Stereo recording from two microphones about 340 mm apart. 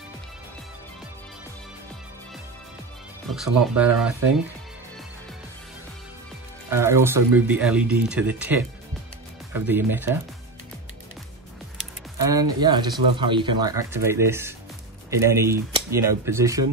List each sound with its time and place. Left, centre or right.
3.3 s speech: centre
6.7 s speech: centre
12.3 s speech: centre